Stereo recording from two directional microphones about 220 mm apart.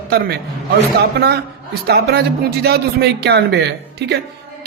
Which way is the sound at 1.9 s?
45° right (ahead or behind).